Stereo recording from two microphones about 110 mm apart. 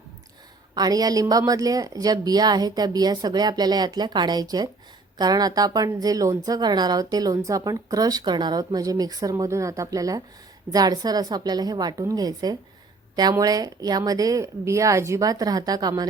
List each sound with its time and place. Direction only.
0.8 s speech: 35° right (ahead or behind)